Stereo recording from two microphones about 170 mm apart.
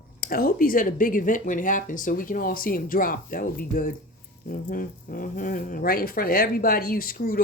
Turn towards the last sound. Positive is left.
turn(degrees=55)  # may be behind; listen again after turning